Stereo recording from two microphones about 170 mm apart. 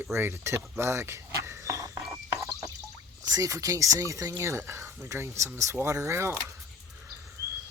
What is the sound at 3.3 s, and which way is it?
Speech, 20° right (ahead or behind).